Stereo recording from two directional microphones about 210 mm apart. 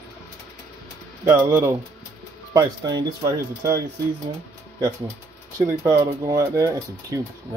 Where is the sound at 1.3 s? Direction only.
10° right (ahead or behind).